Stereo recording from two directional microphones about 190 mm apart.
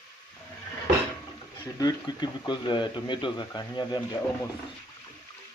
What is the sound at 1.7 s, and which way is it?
Speech, 20° left (ahead or behind).